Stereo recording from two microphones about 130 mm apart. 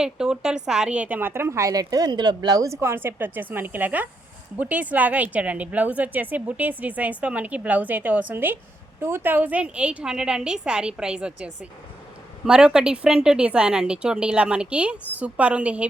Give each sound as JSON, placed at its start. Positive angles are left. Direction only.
{"t": 0.0, "sound": "a woman's voice", "side_deg": -5}